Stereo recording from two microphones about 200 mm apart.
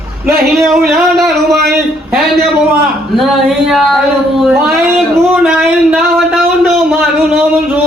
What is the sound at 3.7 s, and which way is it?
A man's voice, centre (ahead or behind).